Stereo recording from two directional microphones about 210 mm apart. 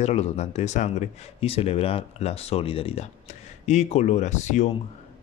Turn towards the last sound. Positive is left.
turn(degrees=35)  # may be behind; listen again after turning